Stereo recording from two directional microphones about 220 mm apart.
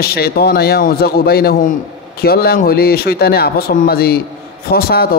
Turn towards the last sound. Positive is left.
turn(degrees=45)  # may be behind; listen again after turning